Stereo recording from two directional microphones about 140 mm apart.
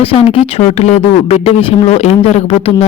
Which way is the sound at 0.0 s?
40° left (ahead or behind).